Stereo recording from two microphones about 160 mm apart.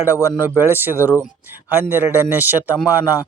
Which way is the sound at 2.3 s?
10° right (ahead or behind).